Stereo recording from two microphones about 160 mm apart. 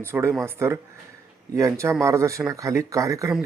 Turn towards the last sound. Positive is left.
turn(degrees=-20)  # may be behind; listen again after turning